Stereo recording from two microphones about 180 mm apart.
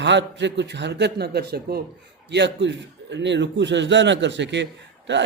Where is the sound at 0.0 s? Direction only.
80° right; by 1.8 s 60° right (ahead or behind).